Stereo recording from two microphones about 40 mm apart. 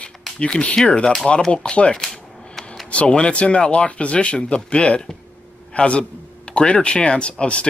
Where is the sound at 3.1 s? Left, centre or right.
Left.